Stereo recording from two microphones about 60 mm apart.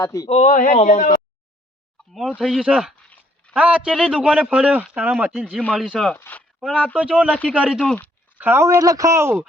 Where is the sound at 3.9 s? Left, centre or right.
Centre.